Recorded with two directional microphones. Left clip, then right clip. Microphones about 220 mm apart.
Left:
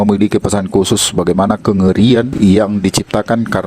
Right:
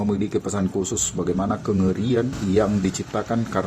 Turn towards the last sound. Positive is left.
turn(degrees=50)  # may be behind; listen again after turning